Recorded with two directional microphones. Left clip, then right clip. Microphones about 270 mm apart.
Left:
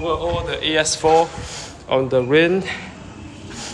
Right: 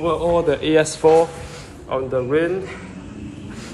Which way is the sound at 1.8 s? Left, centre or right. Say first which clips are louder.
Left 4 dB; centre.